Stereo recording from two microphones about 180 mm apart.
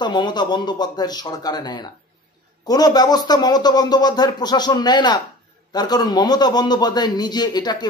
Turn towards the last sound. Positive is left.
turn(degrees=25)  # may be behind; listen again after turning